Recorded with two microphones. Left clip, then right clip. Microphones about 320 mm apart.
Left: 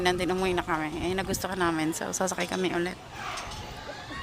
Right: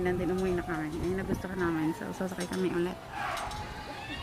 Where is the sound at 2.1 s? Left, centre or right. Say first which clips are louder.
Left 7 dB; left.